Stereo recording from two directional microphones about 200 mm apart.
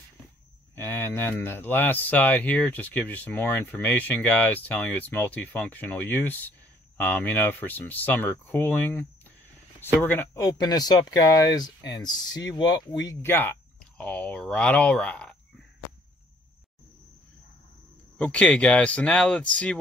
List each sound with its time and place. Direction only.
0.7 s speech: 10° left (ahead or behind)
18.1 s speech: 5° left (ahead or behind)